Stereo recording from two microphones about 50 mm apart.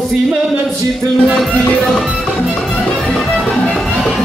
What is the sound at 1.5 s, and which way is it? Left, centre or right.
Music, centre.